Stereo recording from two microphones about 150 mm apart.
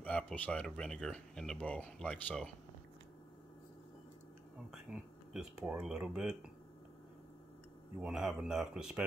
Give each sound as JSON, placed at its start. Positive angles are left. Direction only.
{"t": 0.0, "sound": "speech", "side_deg": 10}
{"t": 4.6, "sound": "speech", "side_deg": -5}
{"t": 8.0, "sound": "speech", "side_deg": -5}